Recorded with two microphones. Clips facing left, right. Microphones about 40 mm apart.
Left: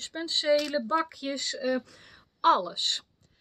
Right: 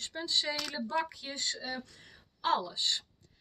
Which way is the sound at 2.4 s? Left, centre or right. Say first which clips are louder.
Left 7 dB; left.